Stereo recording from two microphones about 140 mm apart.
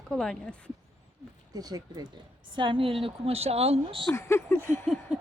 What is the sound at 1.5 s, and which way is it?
Speech, 30° right (ahead or behind).